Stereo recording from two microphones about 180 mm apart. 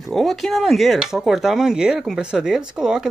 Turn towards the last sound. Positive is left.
turn(degrees=-5)  # may be behind; listen again after turning